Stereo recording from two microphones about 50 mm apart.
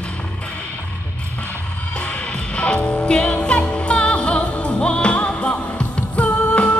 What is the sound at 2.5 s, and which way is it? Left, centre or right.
Music, left.